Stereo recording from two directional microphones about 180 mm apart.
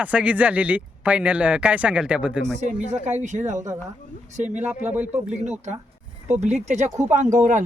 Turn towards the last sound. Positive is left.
turn(degrees=-45)  # may be behind; listen again after turning